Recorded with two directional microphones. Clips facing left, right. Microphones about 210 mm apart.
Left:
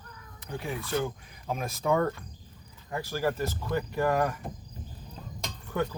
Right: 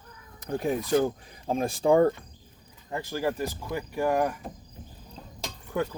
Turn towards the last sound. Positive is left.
turn(degrees=-15)  # may be behind; listen again after turning